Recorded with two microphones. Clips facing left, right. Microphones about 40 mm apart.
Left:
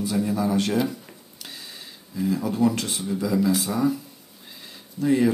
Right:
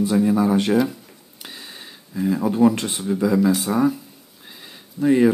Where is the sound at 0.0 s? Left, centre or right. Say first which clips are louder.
Right 6 dB; right.